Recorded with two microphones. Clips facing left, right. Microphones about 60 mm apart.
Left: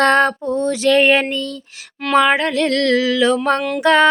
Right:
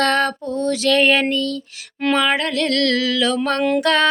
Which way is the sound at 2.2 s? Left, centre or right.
Left.